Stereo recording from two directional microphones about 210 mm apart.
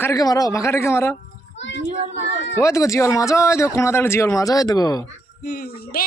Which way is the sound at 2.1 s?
60° left (ahead or behind).